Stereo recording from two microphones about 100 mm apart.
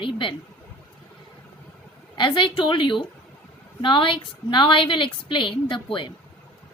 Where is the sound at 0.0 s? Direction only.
55° left (ahead or behind).